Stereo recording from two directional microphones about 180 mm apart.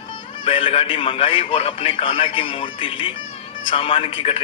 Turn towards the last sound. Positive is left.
turn(degrees=30)  # may be behind; listen again after turning